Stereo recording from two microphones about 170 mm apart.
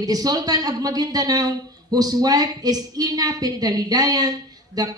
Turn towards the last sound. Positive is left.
turn(degrees=-20)  # may be behind; listen again after turning